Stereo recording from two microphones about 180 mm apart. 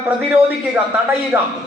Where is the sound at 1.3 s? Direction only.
10° right (ahead or behind).